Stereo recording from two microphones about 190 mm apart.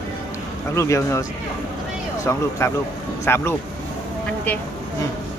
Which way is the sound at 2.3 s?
15° left (ahead or behind).